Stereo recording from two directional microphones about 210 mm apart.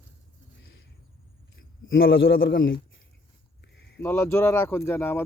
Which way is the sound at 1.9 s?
50° left (ahead or behind).